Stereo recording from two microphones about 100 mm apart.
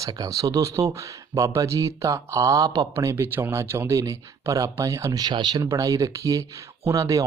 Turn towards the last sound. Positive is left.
turn(degrees=-35)  # may be behind; listen again after turning